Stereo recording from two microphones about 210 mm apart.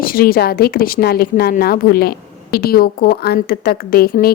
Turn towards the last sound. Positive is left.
turn(degrees=45)  # may be behind; listen again after turning